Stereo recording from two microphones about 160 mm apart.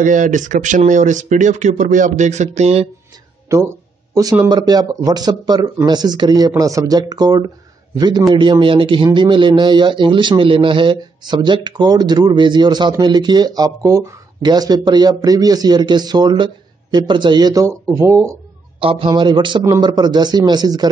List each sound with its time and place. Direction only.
0.0 s speech: 55° right (ahead or behind)
3.4 s a man's voice: 20° right (ahead or behind)
18.8 s a man's voice: 35° right (ahead or behind)